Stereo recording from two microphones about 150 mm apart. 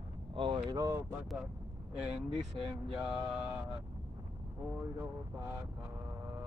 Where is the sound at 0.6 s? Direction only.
25° right (ahead or behind).